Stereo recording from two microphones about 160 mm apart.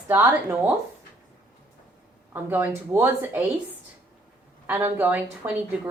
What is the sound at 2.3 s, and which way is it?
A woman's voice, 10° right (ahead or behind).